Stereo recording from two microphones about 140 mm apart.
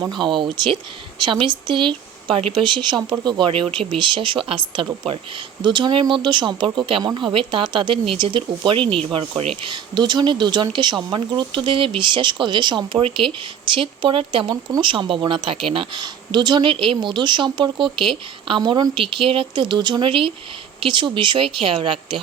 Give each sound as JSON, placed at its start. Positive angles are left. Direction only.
{"t": 0.0, "sound": "speech", "side_deg": -35}
{"t": 14.5, "sound": "speech", "side_deg": -30}